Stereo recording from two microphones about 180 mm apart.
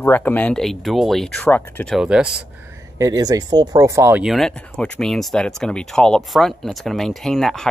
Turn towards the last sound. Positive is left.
turn(degrees=0)  # may be behind; listen again after turning